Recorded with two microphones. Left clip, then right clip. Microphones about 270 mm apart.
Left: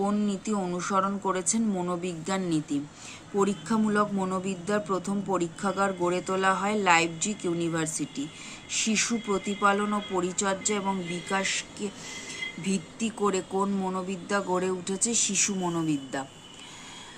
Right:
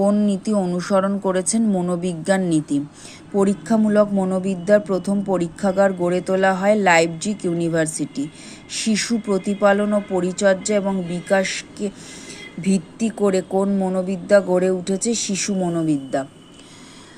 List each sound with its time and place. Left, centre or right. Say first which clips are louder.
0.0 s speech: right 10 dB; centre